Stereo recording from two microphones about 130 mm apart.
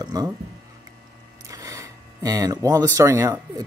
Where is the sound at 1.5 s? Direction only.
25° right (ahead or behind).